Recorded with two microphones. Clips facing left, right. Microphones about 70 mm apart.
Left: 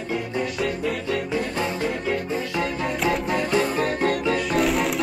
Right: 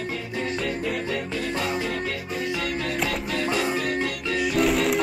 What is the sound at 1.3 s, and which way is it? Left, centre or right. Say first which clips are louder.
Music: left 2 dB; left.